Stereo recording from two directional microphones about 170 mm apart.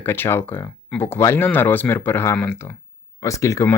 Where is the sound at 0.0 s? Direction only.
15° left (ahead or behind).